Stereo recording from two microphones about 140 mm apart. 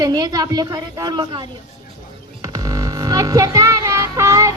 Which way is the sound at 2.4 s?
25° right (ahead or behind).